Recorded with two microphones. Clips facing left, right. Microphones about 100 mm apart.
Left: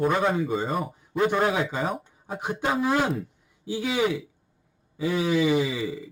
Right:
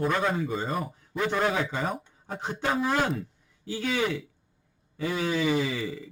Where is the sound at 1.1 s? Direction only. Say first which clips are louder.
Left 3 dB; 15° left (ahead or behind).